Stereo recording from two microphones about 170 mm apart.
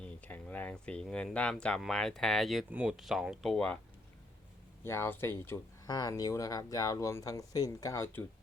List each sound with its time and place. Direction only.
0.0 s speech: 10° left (ahead or behind)
4.8 s speech: 15° left (ahead or behind)